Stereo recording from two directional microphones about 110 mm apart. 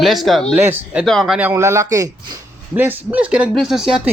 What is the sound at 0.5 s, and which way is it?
Speech, 15° right (ahead or behind).